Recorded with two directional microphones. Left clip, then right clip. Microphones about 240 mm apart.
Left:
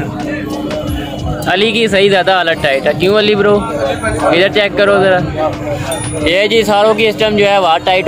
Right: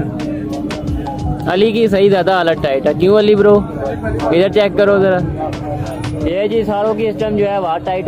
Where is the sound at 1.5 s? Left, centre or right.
Right.